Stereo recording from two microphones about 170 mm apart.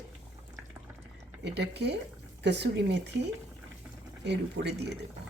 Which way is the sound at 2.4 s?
90° right.